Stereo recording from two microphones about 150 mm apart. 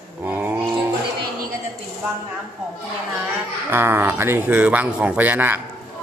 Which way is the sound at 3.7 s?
15° right (ahead or behind).